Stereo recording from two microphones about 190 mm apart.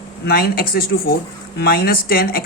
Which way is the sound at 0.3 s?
55° left (ahead or behind).